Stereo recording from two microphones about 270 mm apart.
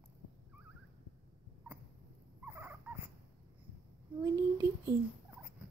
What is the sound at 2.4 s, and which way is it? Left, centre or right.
Dog, centre.